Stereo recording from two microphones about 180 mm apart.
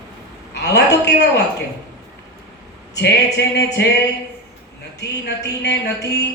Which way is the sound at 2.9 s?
70° left (ahead or behind).